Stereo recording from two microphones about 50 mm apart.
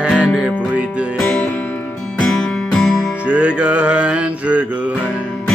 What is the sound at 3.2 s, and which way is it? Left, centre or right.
Music, right.